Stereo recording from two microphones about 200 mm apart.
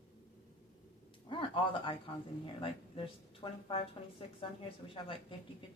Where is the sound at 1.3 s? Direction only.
25° left (ahead or behind).